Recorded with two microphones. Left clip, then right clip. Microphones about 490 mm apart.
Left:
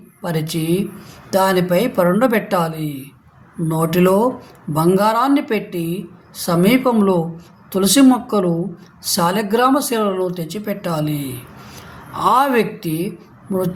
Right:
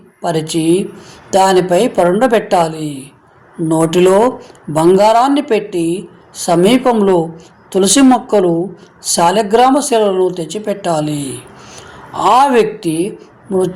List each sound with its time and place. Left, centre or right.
0.2 s speech: left